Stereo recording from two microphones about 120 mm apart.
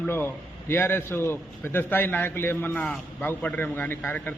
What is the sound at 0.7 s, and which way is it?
A man's voice, 20° left (ahead or behind).